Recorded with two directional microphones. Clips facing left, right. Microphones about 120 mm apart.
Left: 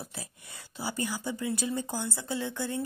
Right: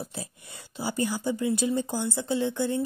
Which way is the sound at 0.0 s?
25° right (ahead or behind).